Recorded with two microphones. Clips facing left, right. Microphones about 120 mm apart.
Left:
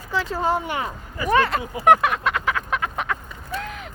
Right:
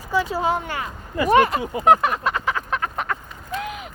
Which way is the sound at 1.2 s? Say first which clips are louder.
Right 3 dB; 20° right (ahead or behind).